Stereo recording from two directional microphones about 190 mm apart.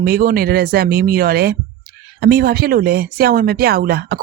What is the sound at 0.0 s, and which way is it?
Speech, 50° right (ahead or behind).